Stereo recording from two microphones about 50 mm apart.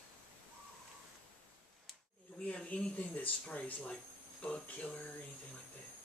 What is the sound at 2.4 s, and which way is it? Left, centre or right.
Speech, left.